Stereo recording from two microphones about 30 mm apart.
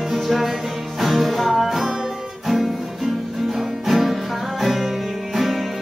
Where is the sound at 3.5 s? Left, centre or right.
Centre.